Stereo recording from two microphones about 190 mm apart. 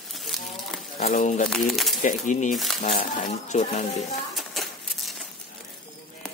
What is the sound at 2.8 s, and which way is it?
Speech, 45° left (ahead or behind).